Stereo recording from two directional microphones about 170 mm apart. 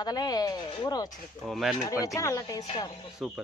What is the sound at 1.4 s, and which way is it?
Stir, centre (ahead or behind).